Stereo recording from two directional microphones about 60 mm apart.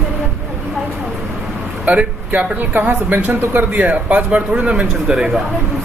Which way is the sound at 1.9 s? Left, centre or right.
Right.